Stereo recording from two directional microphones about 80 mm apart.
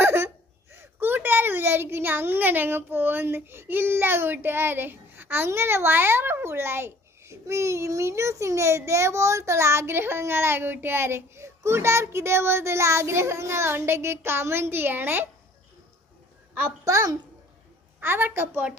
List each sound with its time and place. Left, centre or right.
0.0 s a sound: right
0.7 s a child's voice: right
16.8 s a child's voice: right
18.0 s a child's voice: right